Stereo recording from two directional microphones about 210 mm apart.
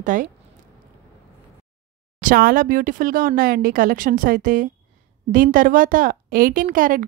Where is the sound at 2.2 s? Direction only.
40° right (ahead or behind).